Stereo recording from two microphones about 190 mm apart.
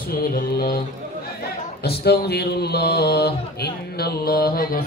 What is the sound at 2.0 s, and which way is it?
Mantra, 55° left (ahead or behind).